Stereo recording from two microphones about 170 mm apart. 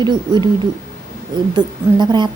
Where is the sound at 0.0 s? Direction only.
25° right (ahead or behind).